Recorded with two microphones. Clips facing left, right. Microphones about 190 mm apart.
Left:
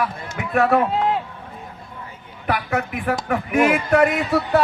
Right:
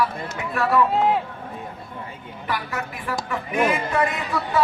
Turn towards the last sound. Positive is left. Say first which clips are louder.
# left 6 dB
turn(degrees=70)  # may be behind; listen again after turning